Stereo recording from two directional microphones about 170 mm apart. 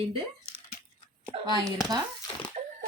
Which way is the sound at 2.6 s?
40° right (ahead or behind).